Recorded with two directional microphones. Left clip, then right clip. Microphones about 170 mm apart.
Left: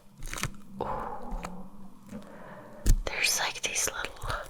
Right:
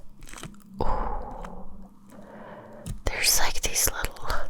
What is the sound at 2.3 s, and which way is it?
Whispering, 55° right (ahead or behind).